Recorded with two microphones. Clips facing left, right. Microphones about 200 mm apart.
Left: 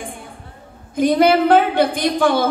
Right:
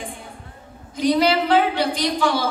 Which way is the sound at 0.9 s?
50° left (ahead or behind).